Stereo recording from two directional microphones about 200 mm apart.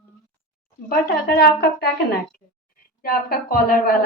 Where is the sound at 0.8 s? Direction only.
50° left (ahead or behind).